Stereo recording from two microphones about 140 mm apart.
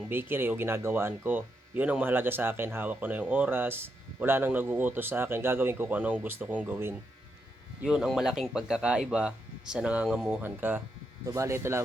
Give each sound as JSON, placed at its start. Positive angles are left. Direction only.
{"t": 0.1, "sound": "speech", "side_deg": -15}
{"t": 7.8, "sound": "speech", "side_deg": -5}